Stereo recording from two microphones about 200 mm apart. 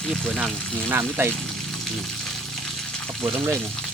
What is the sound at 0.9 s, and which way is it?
Speech, 10° right (ahead or behind).